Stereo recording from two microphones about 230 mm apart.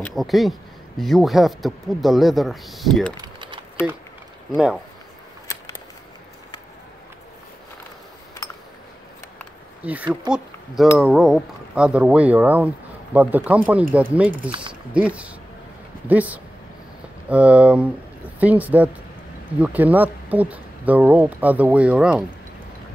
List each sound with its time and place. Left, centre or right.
0.0 s speech: centre
3.2 s typing: right
9.8 s speech: centre